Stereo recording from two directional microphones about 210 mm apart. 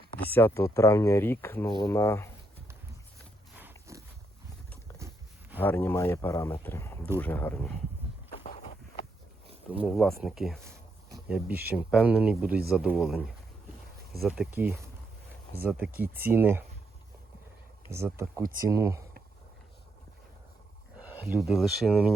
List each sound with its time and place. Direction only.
0.3 s speech: 10° left (ahead or behind)
3.5 s a sound: 10° right (ahead or behind)
5.5 s speech: 10° left (ahead or behind)
8.4 s a sound: 35° left (ahead or behind)
9.8 s speech: centre (ahead or behind)
17.9 s speech: 10° right (ahead or behind)
21.4 s speech: centre (ahead or behind)